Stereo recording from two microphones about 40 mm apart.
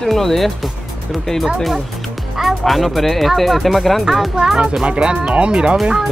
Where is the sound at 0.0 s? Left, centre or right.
Centre.